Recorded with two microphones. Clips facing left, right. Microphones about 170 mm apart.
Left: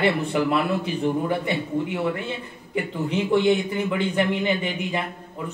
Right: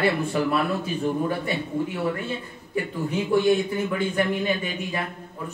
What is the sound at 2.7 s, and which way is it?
A man's voice, 20° left (ahead or behind).